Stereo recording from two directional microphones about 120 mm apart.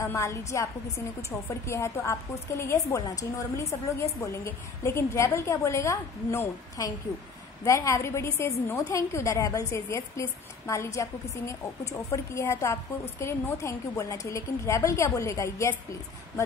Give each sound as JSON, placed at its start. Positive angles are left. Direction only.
{"t": 0.0, "sound": "a woman's voice", "side_deg": 25}